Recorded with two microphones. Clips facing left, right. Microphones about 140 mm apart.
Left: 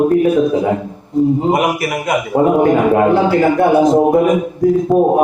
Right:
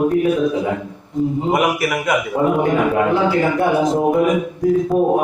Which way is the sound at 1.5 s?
30° left (ahead or behind).